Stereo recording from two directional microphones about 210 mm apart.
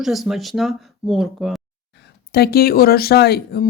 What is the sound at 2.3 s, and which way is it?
Speech, 50° left (ahead or behind).